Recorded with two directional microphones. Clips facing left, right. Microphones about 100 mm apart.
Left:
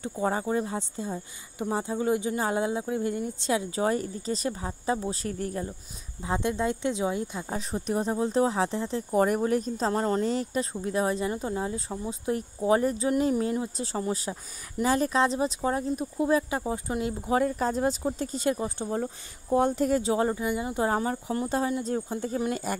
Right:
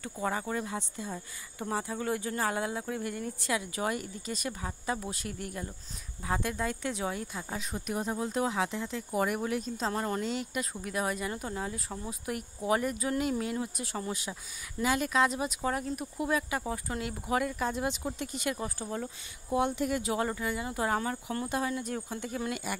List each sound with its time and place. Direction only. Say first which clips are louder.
0.0 s speech: left 5 dB; 30° left (ahead or behind)
6.2 s speech: left 5 dB; 25° left (ahead or behind)
7.5 s speech: left 6 dB; 35° left (ahead or behind)
19.5 s speech: left 6 dB; 40° left (ahead or behind)
22.5 s speech: left 5 dB; 40° left (ahead or behind)